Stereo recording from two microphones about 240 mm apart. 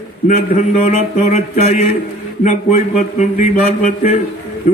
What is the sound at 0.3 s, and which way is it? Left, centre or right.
A man's voice, left.